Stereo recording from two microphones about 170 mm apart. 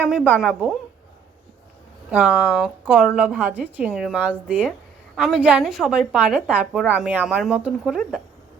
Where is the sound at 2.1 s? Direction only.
5° right (ahead or behind).